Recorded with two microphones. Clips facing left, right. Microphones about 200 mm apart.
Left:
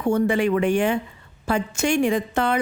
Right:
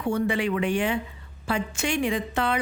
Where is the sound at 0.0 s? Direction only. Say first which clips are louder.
Left 5 dB; 45° left (ahead or behind).